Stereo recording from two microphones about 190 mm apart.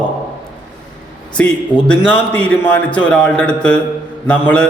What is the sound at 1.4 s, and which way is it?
A man's voice, 10° left (ahead or behind).